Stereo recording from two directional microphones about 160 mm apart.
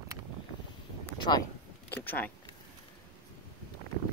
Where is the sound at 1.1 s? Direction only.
30° left (ahead or behind).